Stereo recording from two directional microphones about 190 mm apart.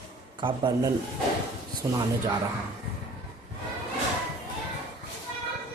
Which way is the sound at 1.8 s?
15° right (ahead or behind).